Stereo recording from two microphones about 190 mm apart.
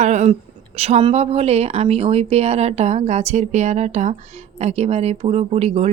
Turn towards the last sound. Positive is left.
turn(degrees=-35)  # may be behind; listen again after turning